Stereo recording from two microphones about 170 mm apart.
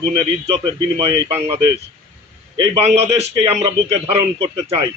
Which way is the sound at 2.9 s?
40° right (ahead or behind).